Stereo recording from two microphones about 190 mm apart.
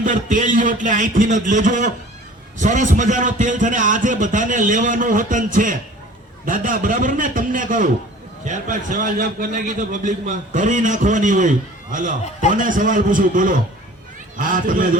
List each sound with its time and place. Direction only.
0.0 s a man's voice: 45° right (ahead or behind)